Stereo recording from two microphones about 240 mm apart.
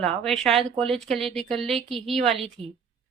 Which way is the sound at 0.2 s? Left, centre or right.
Centre.